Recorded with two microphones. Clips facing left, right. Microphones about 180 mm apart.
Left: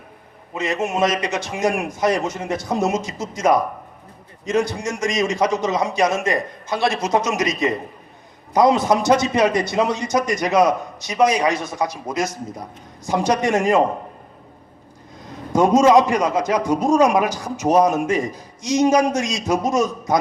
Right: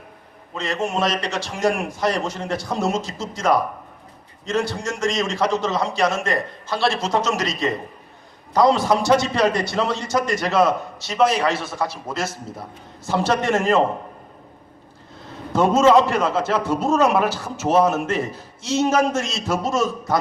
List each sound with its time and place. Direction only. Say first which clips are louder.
0.5 s a man's voice: left 2 dB; 20° left (ahead or behind)
15.5 s a man's voice: left 1 dB; 15° left (ahead or behind)